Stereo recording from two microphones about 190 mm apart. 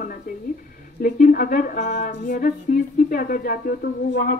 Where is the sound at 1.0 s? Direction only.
45° left (ahead or behind).